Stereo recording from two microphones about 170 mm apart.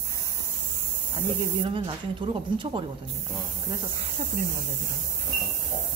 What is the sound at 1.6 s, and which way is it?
Speech, 30° right (ahead or behind).